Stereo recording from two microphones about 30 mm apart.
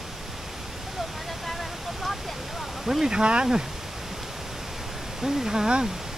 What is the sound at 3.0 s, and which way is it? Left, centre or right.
Speech, right.